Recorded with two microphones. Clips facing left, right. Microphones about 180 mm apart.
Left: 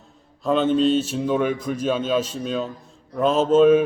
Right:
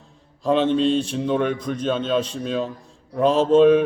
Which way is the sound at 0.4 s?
Centre (ahead or behind).